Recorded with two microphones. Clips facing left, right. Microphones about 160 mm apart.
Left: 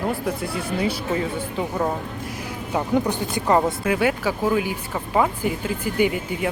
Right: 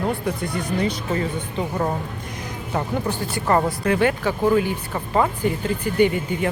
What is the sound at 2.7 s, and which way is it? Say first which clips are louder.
Speech: left 3 dB; 15° left (ahead or behind).